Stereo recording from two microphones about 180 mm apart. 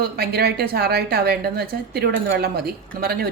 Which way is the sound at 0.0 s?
60° right (ahead or behind).